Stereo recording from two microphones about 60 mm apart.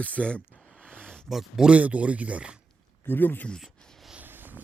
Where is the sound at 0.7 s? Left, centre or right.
Right.